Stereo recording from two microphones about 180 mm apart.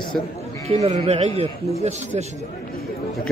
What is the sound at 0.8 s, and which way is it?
Speech, 35° right (ahead or behind).